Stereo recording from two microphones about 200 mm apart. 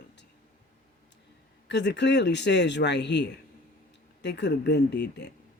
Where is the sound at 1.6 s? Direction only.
60° left (ahead or behind).